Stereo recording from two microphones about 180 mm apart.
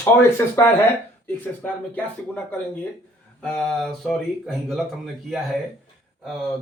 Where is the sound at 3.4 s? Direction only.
5° left (ahead or behind).